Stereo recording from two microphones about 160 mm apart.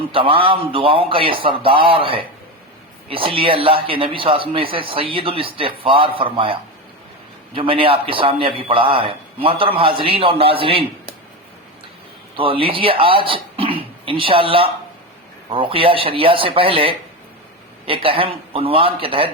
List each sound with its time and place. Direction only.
0.1 s a man's voice: 35° right (ahead or behind)
12.4 s a man's voice: 35° right (ahead or behind)